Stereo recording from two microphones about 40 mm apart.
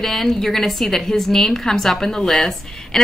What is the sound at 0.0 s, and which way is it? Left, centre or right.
A woman's voice, centre.